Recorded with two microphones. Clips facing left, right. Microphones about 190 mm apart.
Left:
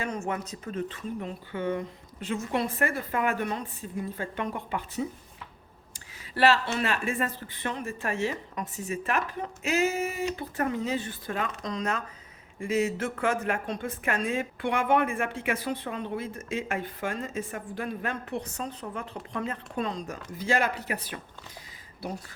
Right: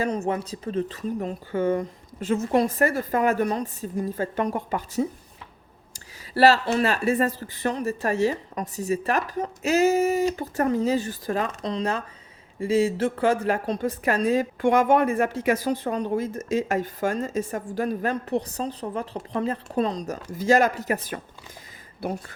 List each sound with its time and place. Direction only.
0.0 s a woman's voice: 35° right (ahead or behind)
6.3 s a woman's voice: 40° right (ahead or behind)
22.0 s speech: 55° right (ahead or behind)